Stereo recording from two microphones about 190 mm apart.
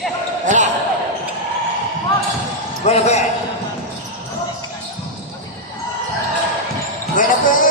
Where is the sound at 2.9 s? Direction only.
35° left (ahead or behind).